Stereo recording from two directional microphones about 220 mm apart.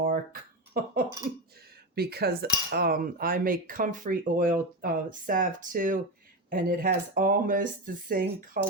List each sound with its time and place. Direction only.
0.7 s cutlery: 40° right (ahead or behind)
2.0 s cutlery: 45° right (ahead or behind)